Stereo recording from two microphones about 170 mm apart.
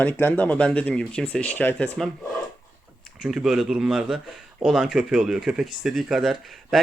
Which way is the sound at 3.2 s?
5° right (ahead or behind).